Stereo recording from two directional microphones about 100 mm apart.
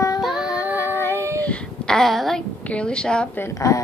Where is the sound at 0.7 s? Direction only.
20° right (ahead or behind).